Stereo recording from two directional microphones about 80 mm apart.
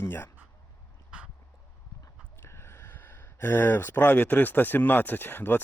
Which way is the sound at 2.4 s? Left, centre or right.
Left.